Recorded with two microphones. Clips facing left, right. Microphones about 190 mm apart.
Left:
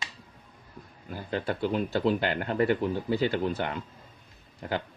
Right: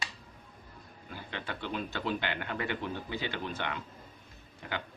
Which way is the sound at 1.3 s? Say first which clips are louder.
Left 9 dB; 40° left (ahead or behind).